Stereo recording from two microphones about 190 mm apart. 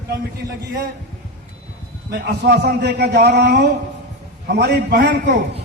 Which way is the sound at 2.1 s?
60° right (ahead or behind).